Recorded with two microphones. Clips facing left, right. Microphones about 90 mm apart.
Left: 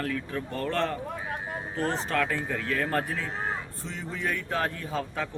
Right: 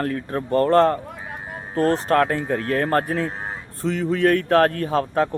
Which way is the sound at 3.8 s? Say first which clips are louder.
Right 17 dB; 75° right (ahead or behind).